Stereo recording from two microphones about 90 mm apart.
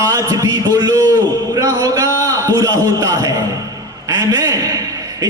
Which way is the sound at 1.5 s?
35° right (ahead or behind).